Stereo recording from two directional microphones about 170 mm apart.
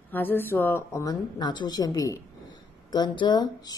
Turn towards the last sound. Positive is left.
turn(degrees=25)  # may be behind; listen again after turning